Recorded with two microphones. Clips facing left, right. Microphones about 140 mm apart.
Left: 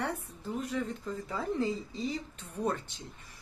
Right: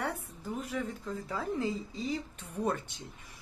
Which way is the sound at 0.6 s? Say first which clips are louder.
Left 2 dB; centre (ahead or behind).